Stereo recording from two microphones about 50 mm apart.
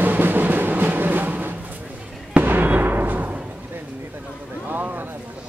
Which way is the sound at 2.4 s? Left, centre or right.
Right.